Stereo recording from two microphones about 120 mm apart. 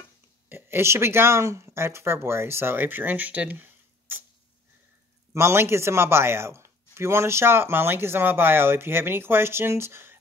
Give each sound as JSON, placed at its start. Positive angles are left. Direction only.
{"t": 0.5, "sound": "speech", "side_deg": -20}
{"t": 5.3, "sound": "speech", "side_deg": -20}